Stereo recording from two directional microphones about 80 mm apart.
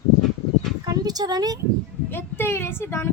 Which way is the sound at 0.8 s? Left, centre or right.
Right.